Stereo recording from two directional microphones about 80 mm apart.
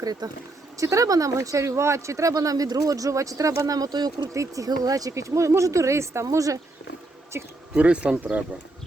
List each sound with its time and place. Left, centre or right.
0.0 s speech: right
0.8 s speech: right
4.4 s speech: right
7.3 s speech: right
7.7 s speech: centre